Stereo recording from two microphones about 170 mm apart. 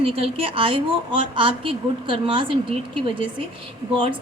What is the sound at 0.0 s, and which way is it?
A woman's voice, 35° right (ahead or behind).